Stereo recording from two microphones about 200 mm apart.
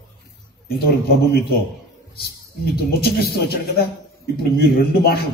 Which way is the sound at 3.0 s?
50° left (ahead or behind).